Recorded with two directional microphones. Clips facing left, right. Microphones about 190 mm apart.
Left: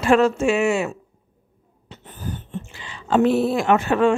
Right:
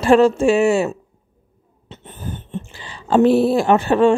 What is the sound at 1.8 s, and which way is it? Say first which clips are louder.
Speech: right 1 dB; 20° right (ahead or behind).